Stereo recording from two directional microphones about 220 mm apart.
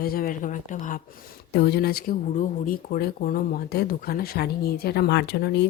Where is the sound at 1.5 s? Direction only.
45° left (ahead or behind).